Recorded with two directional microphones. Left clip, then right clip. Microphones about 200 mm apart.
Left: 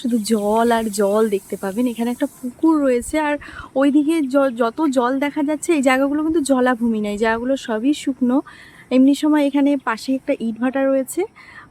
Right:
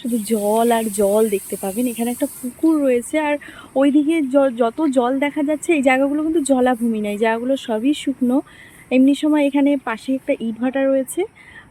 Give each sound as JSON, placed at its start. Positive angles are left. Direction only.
{"t": 0.2, "sound": "speech", "side_deg": 15}
{"t": 0.6, "sound": "speech", "side_deg": 0}